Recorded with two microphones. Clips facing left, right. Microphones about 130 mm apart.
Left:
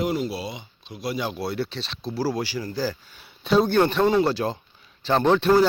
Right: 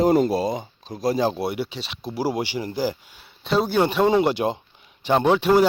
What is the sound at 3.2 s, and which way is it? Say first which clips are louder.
Speech: left 2 dB; centre (ahead or behind).